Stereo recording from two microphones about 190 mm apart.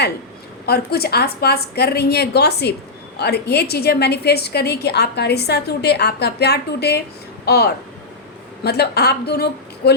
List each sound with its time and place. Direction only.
0.6 s a woman's voice: 55° left (ahead or behind)